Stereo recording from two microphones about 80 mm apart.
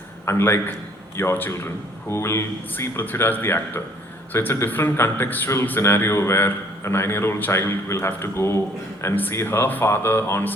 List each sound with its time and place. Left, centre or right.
0.3 s a man's voice: left